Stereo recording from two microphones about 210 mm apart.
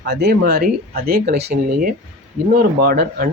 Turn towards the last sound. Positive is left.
turn(degrees=-45)  # may be behind; listen again after turning